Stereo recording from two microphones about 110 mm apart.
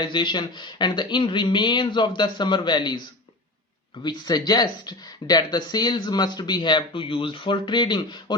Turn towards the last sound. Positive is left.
turn(degrees=45)  # may be behind; listen again after turning